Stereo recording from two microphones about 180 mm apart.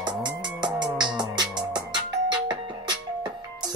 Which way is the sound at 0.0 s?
25° right (ahead or behind).